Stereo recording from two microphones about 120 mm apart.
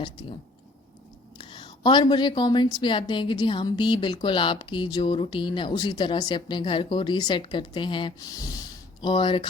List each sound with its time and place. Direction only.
0.0 s a woman's voice: 40° left (ahead or behind)
1.4 s a woman's voice: 40° left (ahead or behind)
9.0 s a woman's voice: 40° left (ahead or behind)